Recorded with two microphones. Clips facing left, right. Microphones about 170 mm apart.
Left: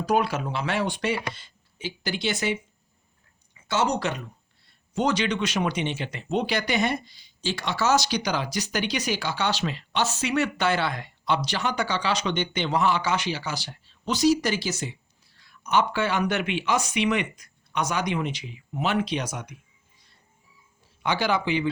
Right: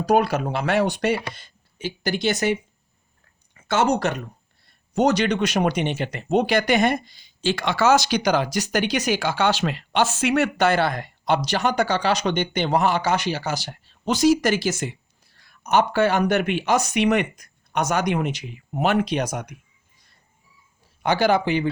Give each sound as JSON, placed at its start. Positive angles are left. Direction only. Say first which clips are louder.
{"t": 0.0, "sound": "speech", "louder": "right 5 dB", "side_deg": -40}
{"t": 3.6, "sound": "speech", "louder": "right 5 dB", "side_deg": -50}
{"t": 21.0, "sound": "speech", "louder": "right 6 dB", "side_deg": -45}